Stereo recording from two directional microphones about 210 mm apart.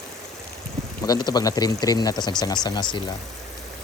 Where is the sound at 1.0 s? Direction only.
20° left (ahead or behind).